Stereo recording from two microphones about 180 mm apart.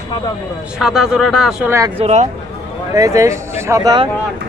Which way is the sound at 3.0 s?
15° right (ahead or behind).